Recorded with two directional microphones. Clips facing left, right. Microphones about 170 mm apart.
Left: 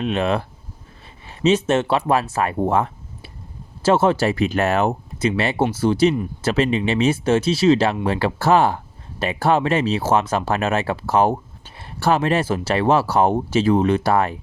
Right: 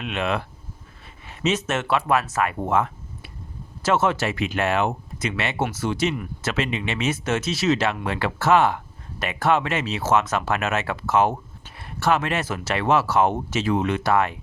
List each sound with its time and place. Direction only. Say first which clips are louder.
0.0 s speech: left 5 dB; 35° left (ahead or behind)